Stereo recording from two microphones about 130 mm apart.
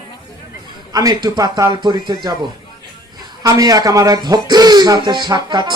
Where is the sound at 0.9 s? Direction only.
30° right (ahead or behind).